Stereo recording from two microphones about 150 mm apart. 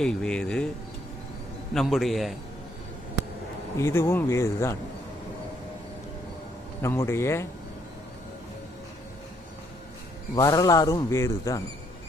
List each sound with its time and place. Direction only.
0.0 s speech: 5° left (ahead or behind)
1.7 s speech: centre (ahead or behind)
3.8 s speech: 20° left (ahead or behind)
6.8 s speech: 15° left (ahead or behind)
10.3 s speech: 25° left (ahead or behind)